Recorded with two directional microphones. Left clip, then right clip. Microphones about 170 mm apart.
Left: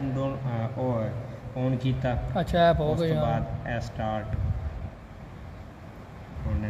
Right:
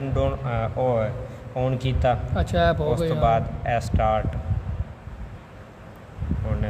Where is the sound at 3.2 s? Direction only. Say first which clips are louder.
Right 8 dB; 75° right (ahead or behind).